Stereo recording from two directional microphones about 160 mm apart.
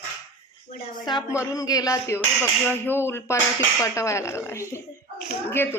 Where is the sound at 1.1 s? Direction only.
25° left (ahead or behind).